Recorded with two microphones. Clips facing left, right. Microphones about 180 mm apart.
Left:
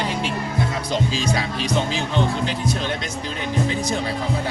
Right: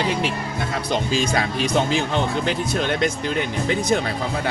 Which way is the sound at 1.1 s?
55° right (ahead or behind).